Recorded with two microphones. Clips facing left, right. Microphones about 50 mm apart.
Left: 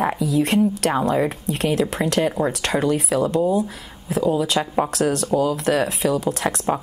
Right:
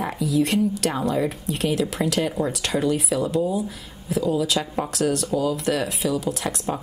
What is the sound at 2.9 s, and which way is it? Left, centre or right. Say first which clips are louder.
A woman's voice: left 3 dB; left.